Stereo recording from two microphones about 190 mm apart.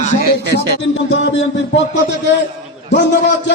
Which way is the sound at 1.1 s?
75° left (ahead or behind).